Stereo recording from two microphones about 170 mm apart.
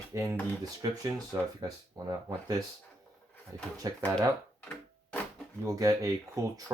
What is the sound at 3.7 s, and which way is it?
Speech, 20° right (ahead or behind).